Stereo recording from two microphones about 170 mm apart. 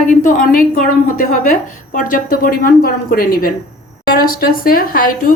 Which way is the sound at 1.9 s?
55° left (ahead or behind).